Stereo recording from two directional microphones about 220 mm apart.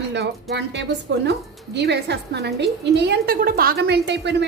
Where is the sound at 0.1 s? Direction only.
50° right (ahead or behind).